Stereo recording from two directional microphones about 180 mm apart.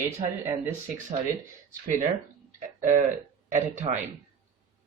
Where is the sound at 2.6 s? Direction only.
40° right (ahead or behind).